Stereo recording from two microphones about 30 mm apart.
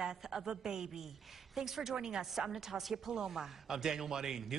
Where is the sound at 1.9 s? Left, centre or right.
Right.